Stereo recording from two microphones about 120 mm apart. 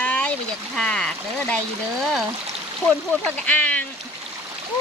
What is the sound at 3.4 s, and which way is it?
Speech, 10° left (ahead or behind).